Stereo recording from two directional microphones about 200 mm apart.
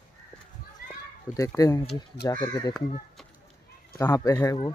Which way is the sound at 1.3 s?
15° left (ahead or behind).